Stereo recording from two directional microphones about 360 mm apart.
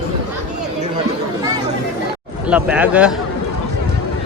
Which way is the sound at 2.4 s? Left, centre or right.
Centre.